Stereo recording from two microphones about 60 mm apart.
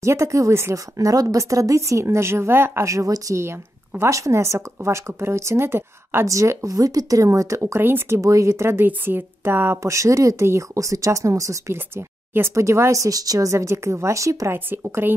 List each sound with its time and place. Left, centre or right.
0.0 s speech: right
0.9 s a woman's voice: right
2.8 s a woman's voice: right
6.2 s a woman's voice: right
6.7 s a woman's voice: right
8.2 s speech: right
9.8 s a woman's voice: right
10.4 s a woman's voice: right
12.5 s a woman's voice: right
14.5 s speech: right